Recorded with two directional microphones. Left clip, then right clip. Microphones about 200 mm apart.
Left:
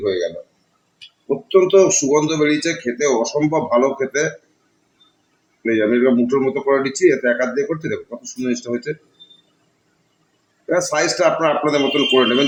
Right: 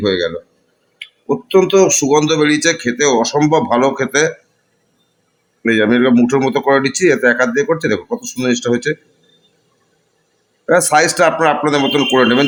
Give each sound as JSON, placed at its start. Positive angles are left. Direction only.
{"t": 1.5, "sound": "speech", "side_deg": -50}
{"t": 5.6, "sound": "speech", "side_deg": -50}
{"t": 10.7, "sound": "speech", "side_deg": -55}